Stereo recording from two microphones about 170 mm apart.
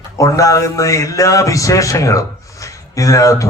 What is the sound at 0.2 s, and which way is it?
Mantra, 20° left (ahead or behind).